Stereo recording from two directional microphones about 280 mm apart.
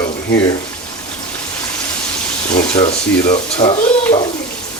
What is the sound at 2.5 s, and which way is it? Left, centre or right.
Speech, centre.